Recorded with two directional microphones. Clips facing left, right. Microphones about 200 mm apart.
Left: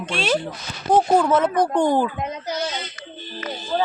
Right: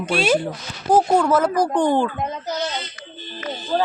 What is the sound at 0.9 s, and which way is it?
Speech, 5° left (ahead or behind).